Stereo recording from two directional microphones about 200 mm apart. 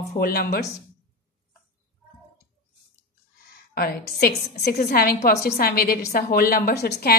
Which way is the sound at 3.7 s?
50° left (ahead or behind).